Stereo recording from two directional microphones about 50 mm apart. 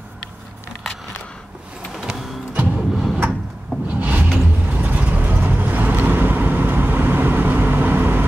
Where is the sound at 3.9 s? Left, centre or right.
Right.